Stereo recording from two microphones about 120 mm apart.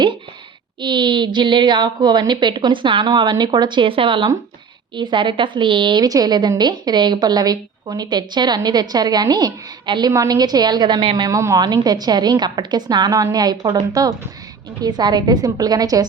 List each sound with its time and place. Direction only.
0.8 s a woman's voice: 40° right (ahead or behind)
11.3 s a woman's voice: 25° right (ahead or behind)